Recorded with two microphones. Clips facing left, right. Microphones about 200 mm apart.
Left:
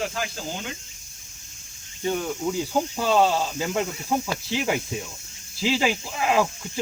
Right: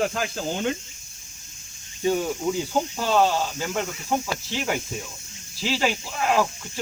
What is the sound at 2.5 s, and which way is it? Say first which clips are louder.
Speech: even; 5° left (ahead or behind).